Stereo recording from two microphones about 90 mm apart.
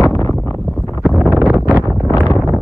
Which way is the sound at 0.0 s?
35° left (ahead or behind).